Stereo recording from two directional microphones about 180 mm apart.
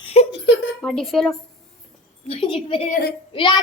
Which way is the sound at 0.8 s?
5° left (ahead or behind).